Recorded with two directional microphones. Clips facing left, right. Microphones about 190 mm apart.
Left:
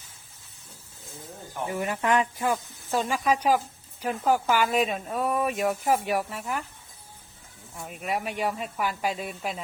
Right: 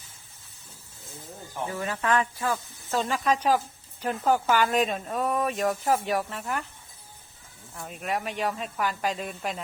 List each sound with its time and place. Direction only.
1.6 s speech: 15° left (ahead or behind)
7.8 s speech: 5° left (ahead or behind)